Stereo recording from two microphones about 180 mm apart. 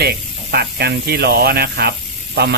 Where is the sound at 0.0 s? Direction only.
65° right (ahead or behind).